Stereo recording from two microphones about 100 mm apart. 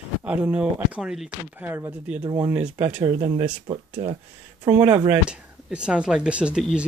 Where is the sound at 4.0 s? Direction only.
35° right (ahead or behind).